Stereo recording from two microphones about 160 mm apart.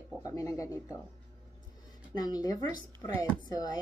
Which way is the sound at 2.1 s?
25° left (ahead or behind).